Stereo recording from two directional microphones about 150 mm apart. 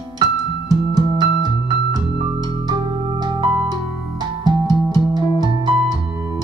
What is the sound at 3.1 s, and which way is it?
Keyboard, 30° right (ahead or behind).